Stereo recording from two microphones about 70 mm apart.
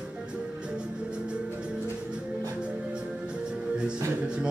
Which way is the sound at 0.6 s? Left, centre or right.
Centre.